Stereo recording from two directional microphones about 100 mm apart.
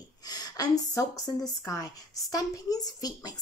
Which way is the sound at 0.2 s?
40° left (ahead or behind).